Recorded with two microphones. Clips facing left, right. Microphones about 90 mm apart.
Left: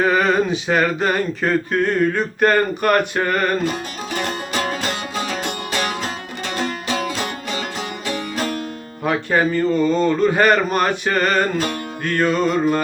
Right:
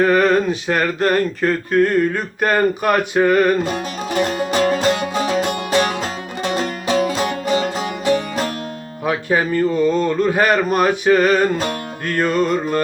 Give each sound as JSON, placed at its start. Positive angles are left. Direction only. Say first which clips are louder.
{"t": 0.0, "sound": "speech", "louder": "right 2 dB", "side_deg": 0}
{"t": 3.2, "sound": "music", "louder": "right 5 dB", "side_deg": -5}
{"t": 4.1, "sound": "music", "louder": "right 6 dB", "side_deg": -40}
{"t": 9.0, "sound": "speech", "louder": "even", "side_deg": -5}